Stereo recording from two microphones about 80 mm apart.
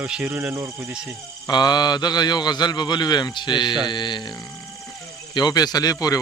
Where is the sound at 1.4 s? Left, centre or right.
Left.